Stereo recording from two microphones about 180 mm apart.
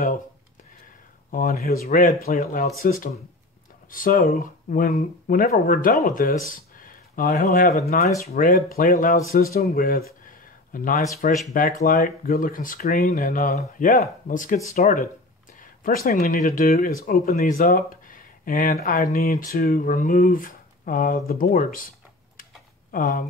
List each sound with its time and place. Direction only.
1.3 s speech: 55° left (ahead or behind)
2.4 s a man's voice: 40° left (ahead or behind); by 10.0 s 55° left (ahead or behind)
10.2 s a sound: 50° left (ahead or behind)
11.4 s speech: 45° left (ahead or behind)
15.8 s speech: 50° left (ahead or behind)
22.4 s tick-tock: 50° left (ahead or behind)